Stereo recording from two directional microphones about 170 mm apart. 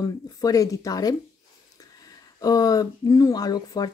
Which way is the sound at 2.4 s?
20° left (ahead or behind).